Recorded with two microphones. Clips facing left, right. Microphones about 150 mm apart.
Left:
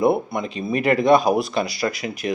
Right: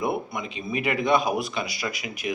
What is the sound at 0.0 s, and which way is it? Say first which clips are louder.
Speech: left 8 dB; 35° left (ahead or behind).